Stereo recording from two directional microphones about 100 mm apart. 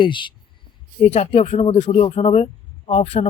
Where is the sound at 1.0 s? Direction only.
90° left.